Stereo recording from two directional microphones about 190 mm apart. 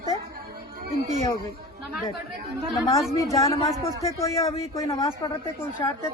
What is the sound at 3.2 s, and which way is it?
A man's voice, 15° left (ahead or behind).